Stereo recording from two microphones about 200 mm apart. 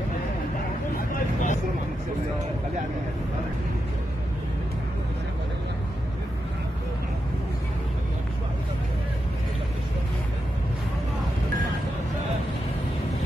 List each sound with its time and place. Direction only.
0.9 s vehicle: 40° left (ahead or behind)